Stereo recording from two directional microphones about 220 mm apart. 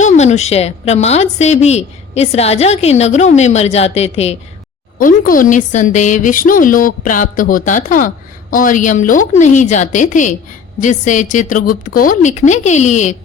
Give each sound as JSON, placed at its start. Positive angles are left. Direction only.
{"t": 0.0, "sound": "a woman's voice", "side_deg": 30}
{"t": 4.9, "sound": "a woman's voice", "side_deg": 40}